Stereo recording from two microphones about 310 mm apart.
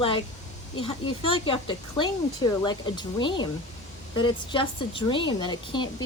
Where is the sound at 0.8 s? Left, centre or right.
Centre.